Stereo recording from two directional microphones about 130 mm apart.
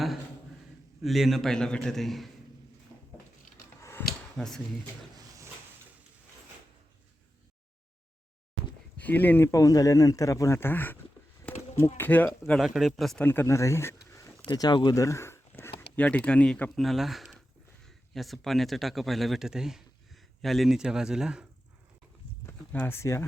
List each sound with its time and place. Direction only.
1.0 s a man's voice: centre (ahead or behind)
2.9 s a sound: 5° right (ahead or behind)
9.0 s speech: 15° left (ahead or behind)
9.5 s speech: 25° left (ahead or behind)
12.5 s a man's voice: centre (ahead or behind)
13.2 s speech: 15° left (ahead or behind)
14.4 s speech: 35° left (ahead or behind); by 21.4 s 5° right (ahead or behind)
22.4 s speech: 15° left (ahead or behind)